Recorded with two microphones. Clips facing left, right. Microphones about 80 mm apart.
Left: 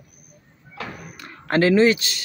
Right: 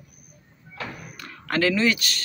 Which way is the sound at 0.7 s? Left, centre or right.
Left.